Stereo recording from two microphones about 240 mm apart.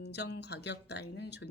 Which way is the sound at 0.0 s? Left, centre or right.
Left.